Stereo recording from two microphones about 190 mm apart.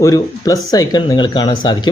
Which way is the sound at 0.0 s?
20° left (ahead or behind).